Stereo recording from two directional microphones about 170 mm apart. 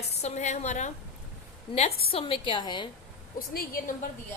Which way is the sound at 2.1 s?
30° left (ahead or behind).